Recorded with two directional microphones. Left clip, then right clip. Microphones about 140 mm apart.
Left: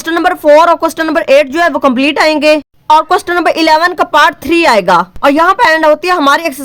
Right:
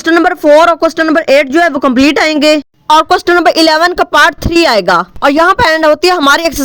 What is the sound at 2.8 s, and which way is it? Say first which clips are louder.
A woman's voice: right 1 dB; 45° right (ahead or behind).